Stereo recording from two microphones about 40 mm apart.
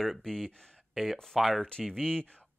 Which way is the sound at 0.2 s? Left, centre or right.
Centre.